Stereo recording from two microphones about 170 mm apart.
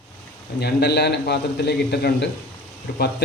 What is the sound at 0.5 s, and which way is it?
A man's voice, 70° left (ahead or behind).